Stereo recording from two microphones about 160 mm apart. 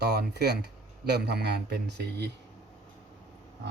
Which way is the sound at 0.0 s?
90° right.